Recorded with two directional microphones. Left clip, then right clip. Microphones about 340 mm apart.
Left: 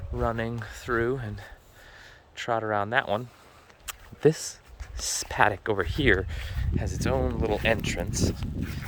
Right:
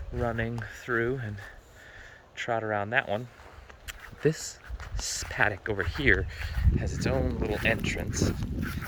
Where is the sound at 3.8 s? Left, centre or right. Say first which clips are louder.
Left 5 dB; centre.